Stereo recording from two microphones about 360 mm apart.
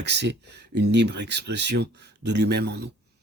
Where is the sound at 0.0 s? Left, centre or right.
Right.